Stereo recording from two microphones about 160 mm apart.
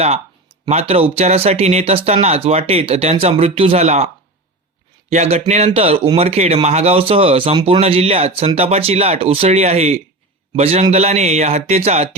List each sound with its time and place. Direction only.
0.7 s a man's voice: 40° right (ahead or behind)